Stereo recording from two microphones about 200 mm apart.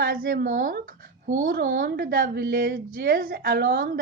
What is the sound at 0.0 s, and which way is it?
A woman's voice, 45° right (ahead or behind).